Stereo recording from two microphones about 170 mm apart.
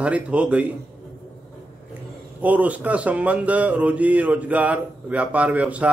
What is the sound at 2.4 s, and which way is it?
Speech, 10° right (ahead or behind).